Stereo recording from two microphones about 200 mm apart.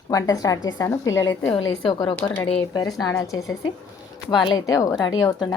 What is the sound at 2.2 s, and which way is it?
A woman's voice, 10° left (ahead or behind).